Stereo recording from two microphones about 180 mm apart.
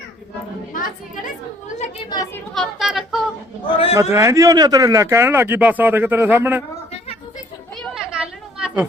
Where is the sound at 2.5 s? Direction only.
Centre (ahead or behind).